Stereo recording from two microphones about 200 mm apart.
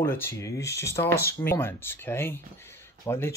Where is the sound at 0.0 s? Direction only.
10° left (ahead or behind).